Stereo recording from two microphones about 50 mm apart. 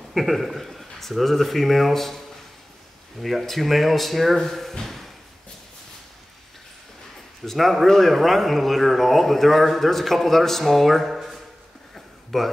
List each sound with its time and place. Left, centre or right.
0.1 s speech: centre
3.2 s speech: centre
7.4 s speech: centre
11.9 s a sound: centre